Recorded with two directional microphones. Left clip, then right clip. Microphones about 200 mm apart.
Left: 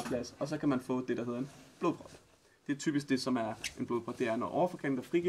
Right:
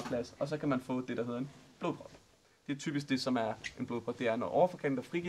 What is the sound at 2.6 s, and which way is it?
Speech, 15° right (ahead or behind).